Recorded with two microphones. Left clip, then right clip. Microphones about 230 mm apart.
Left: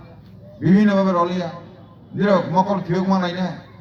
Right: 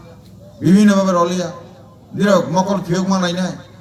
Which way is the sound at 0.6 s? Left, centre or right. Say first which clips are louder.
Right 3 dB; right.